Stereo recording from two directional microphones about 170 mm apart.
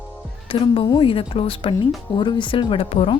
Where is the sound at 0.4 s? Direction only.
30° left (ahead or behind).